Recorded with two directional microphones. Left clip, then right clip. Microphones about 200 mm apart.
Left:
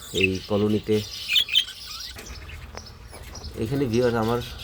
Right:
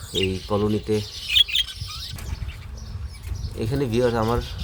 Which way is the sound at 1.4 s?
10° right (ahead or behind).